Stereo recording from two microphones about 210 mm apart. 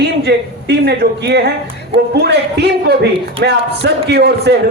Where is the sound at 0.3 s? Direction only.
50° right (ahead or behind).